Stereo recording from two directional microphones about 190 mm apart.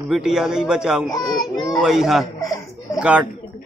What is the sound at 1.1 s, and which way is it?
Speech, 20° left (ahead or behind).